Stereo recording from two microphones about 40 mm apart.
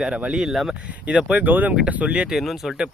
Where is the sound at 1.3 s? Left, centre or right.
Right.